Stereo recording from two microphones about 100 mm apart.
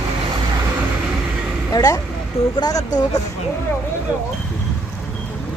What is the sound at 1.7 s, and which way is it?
Speech, 40° left (ahead or behind).